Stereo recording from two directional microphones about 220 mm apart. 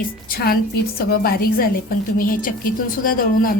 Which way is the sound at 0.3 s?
45° left (ahead or behind).